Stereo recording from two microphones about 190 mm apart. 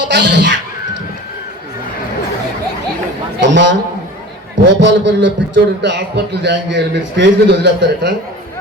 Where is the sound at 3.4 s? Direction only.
70° right (ahead or behind).